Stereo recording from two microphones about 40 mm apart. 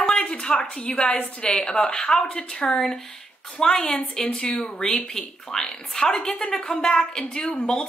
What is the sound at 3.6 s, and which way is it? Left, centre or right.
A woman's voice, centre.